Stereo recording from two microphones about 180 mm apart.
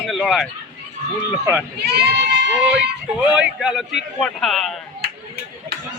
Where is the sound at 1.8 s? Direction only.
65° right (ahead or behind).